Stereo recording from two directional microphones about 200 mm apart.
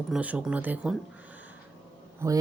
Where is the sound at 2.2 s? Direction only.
15° right (ahead or behind).